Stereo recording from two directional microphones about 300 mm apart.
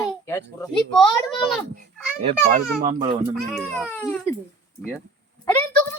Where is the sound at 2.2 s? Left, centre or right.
Right.